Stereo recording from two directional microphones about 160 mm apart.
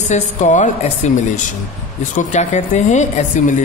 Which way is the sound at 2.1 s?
50° left (ahead or behind).